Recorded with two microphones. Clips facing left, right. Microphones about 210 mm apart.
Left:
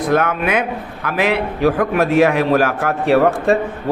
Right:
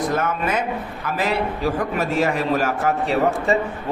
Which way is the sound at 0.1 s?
65° left (ahead or behind).